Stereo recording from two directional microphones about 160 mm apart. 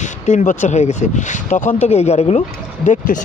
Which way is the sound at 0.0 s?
50° left (ahead or behind).